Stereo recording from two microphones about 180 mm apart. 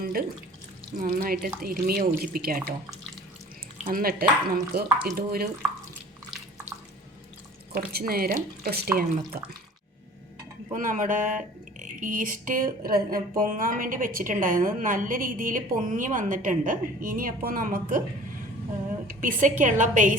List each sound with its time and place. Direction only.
0.0 s water tap: 55° right (ahead or behind)
0.9 s speech: 45° right (ahead or behind)
3.8 s speech: 50° right (ahead or behind)
7.9 s speech: 55° right (ahead or behind)
10.7 s speech: 45° right (ahead or behind)
19.0 s speech: 50° right (ahead or behind)